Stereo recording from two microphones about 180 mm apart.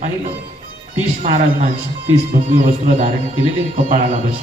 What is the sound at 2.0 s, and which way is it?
A man's voice, 40° right (ahead or behind).